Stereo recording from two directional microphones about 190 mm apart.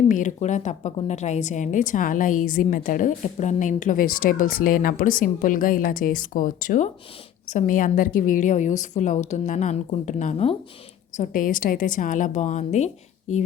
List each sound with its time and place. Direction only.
0.1 s a woman's voice: 40° left (ahead or behind)
11.2 s a woman's voice: 45° left (ahead or behind)